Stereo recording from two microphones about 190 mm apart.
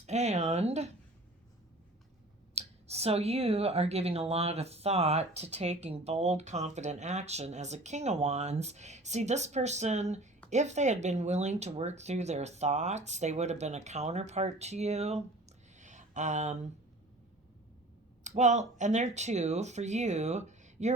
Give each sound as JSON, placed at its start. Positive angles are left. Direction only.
{"t": 0.0, "sound": "speech", "side_deg": -35}
{"t": 2.6, "sound": "speech", "side_deg": -35}
{"t": 15.7, "sound": "a sound", "side_deg": -40}
{"t": 18.2, "sound": "speech", "side_deg": -40}